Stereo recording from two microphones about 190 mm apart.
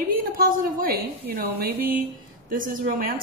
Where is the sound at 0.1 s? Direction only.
50° right (ahead or behind).